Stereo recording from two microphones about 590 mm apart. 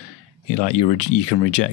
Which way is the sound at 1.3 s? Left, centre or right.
Left.